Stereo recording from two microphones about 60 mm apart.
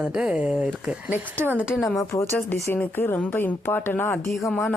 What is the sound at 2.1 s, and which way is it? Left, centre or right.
Speech, left.